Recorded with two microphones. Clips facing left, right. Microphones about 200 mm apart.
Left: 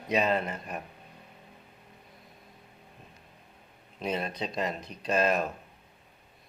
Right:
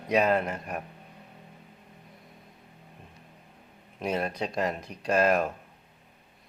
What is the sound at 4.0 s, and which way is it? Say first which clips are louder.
Speech: right 3 dB; 10° right (ahead or behind).